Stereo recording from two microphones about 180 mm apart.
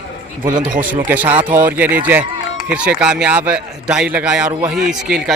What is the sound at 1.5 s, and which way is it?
Speech, 50° right (ahead or behind).